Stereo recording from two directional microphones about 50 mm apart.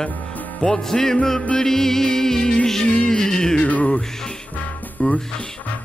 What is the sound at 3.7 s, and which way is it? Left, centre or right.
Music, left.